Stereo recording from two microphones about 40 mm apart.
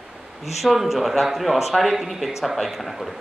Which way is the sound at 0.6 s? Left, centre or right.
Centre.